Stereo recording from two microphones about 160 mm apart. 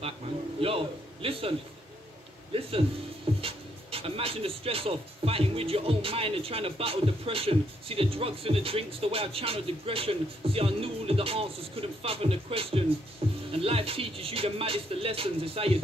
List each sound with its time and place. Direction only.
0.6 s a man's voice: 35° right (ahead or behind)
2.5 s speech: 35° right (ahead or behind)